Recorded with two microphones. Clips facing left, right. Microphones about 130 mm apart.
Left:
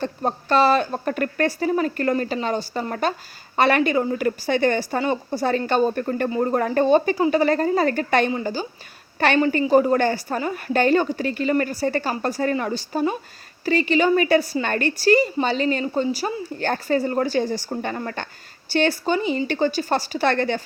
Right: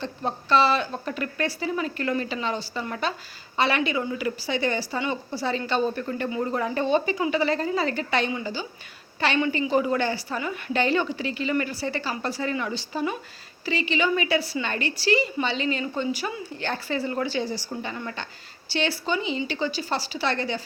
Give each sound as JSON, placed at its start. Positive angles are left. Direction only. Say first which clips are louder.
{"t": 0.0, "sound": "a woman's voice", "louder": "left 5 dB", "side_deg": 45}